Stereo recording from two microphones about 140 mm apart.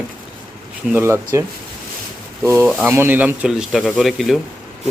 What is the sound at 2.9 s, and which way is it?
Speech, 15° right (ahead or behind).